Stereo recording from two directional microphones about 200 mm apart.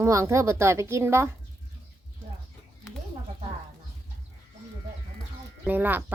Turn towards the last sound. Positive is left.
turn(degrees=-10)  # may be behind; listen again after turning